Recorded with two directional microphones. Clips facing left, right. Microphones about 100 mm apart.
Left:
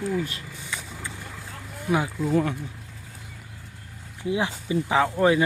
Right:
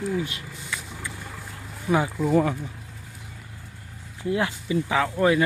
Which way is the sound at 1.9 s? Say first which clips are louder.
Right 2 dB; centre (ahead or behind).